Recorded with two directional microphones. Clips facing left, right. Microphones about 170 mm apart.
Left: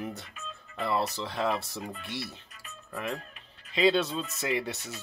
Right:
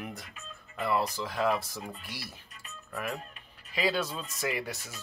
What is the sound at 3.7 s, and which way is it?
Speech, 25° left (ahead or behind).